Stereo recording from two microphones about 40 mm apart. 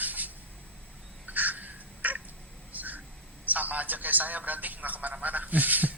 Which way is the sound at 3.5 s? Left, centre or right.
Right.